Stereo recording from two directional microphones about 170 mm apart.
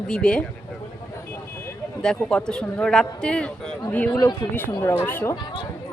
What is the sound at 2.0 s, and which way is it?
A woman's voice, 5° left (ahead or behind).